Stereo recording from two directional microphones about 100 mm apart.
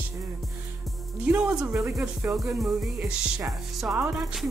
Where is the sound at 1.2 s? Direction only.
5° right (ahead or behind).